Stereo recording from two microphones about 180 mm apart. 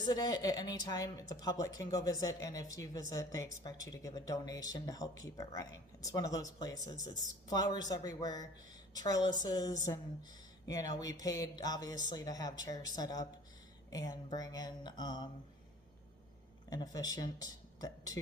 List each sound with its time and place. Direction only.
0.0 s a woman's voice: 20° left (ahead or behind)
16.6 s speech: 20° left (ahead or behind)